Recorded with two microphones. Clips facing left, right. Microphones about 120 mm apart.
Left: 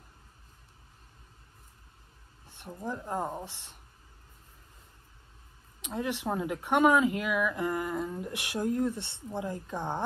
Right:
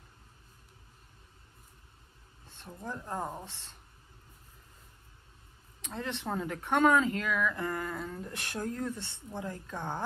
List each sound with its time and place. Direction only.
2.4 s speech: 15° left (ahead or behind)
5.8 s speech: 15° left (ahead or behind)